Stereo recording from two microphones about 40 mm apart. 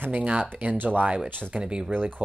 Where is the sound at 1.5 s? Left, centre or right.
Right.